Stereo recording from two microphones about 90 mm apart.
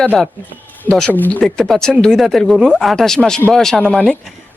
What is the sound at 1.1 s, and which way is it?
Speech, 20° left (ahead or behind).